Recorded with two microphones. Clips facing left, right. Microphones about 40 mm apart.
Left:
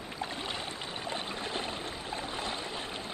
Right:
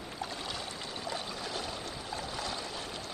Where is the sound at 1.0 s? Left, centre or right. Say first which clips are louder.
Left 2 dB; left.